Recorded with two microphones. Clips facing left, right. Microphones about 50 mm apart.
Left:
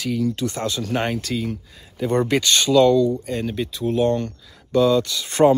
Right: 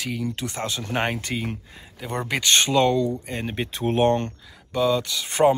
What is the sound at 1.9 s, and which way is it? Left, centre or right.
Speech, centre.